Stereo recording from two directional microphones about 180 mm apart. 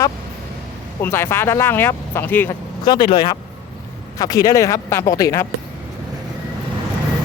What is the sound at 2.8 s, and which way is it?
Speech, 25° left (ahead or behind).